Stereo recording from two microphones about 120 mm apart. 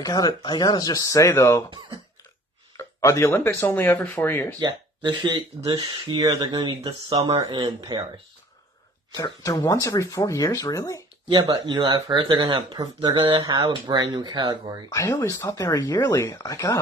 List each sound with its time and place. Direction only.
0.0 s speech: 35° left (ahead or behind)
2.8 s speech: 25° left (ahead or behind)
4.6 s speech: 40° right (ahead or behind)
9.1 s speech: 30° left (ahead or behind)
11.2 s speech: 35° right (ahead or behind)
14.9 s speech: 25° left (ahead or behind)